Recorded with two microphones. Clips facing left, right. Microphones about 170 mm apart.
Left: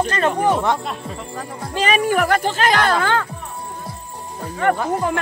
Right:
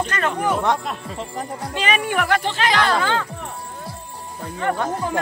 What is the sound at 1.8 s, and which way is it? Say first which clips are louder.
Speech: left 4 dB; 40° left (ahead or behind).